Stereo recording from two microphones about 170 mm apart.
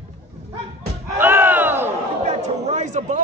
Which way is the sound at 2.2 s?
45° right (ahead or behind).